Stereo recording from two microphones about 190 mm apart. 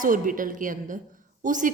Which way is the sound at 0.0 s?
45° right (ahead or behind).